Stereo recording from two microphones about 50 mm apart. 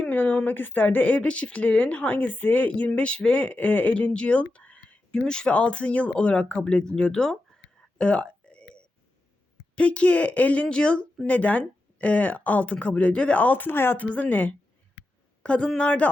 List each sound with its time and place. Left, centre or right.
0.1 s a sound: left
0.4 s a woman's voice: left
5.1 s a woman's voice: centre
7.9 s a sound: left
9.7 s a woman's voice: left
11.3 s a woman's voice: left
13.4 s speech: left
14.0 s a woman's voice: left